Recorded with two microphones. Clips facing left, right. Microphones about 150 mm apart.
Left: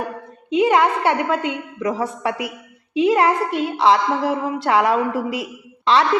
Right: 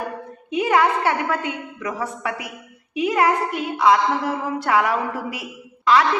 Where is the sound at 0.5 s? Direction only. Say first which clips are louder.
Left 3 dB; 25° left (ahead or behind).